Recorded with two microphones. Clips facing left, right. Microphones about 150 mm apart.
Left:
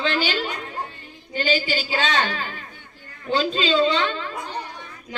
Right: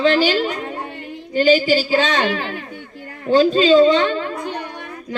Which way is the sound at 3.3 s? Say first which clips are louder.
Right 9 dB; 45° right (ahead or behind).